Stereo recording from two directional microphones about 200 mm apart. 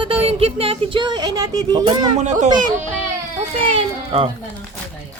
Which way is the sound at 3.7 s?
30° right (ahead or behind).